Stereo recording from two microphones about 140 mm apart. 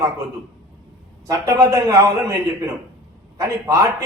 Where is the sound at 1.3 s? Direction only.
20° right (ahead or behind).